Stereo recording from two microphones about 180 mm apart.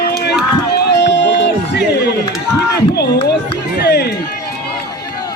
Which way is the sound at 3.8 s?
65° left (ahead or behind).